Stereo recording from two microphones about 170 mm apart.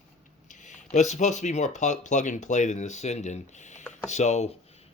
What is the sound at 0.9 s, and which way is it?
Speech, 45° left (ahead or behind).